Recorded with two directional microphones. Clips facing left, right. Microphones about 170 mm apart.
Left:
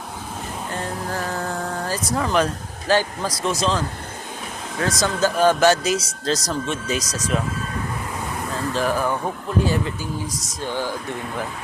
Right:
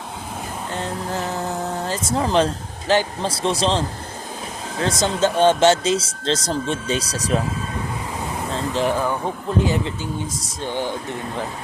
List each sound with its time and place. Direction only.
0.7 s speech: 20° right (ahead or behind)
8.4 s speech: 25° right (ahead or behind)